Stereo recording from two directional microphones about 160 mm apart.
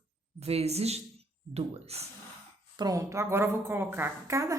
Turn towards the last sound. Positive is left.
turn(degrees=-20)  # may be behind; listen again after turning